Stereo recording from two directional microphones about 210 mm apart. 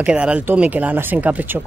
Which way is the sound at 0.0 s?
5° right (ahead or behind).